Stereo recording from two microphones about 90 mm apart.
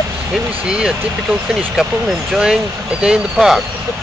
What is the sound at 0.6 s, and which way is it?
Speech, 10° right (ahead or behind).